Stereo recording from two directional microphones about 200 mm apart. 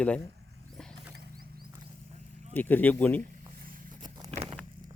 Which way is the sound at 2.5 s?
10° left (ahead or behind).